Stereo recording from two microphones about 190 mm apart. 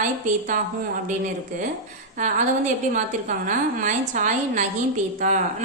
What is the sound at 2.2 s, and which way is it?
A woman's voice, 40° right (ahead or behind).